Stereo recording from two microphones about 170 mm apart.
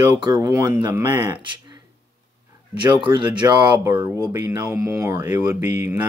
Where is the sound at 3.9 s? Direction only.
15° right (ahead or behind).